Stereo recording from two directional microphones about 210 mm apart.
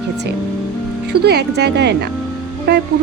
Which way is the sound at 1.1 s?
50° right (ahead or behind).